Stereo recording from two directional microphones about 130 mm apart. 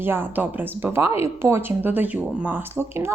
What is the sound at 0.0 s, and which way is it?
Speech, 15° right (ahead or behind).